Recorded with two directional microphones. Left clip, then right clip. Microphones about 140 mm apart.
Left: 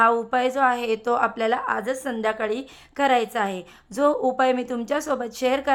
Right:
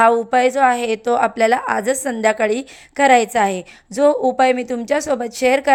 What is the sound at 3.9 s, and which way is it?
A woman's voice, 15° right (ahead or behind).